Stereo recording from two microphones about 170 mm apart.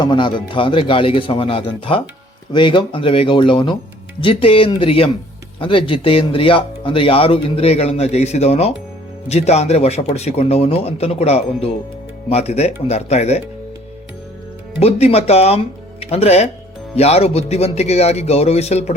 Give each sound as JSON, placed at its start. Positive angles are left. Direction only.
{"t": 0.0, "sound": "speech", "side_deg": 25}
{"t": 14.8, "sound": "speech", "side_deg": 35}